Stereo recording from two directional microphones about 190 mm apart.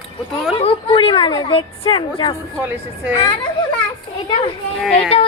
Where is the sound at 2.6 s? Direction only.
10° right (ahead or behind).